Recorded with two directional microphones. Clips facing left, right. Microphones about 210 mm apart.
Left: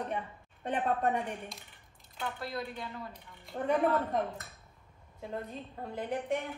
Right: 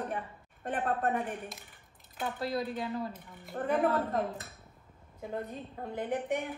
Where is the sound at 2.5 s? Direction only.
40° right (ahead or behind).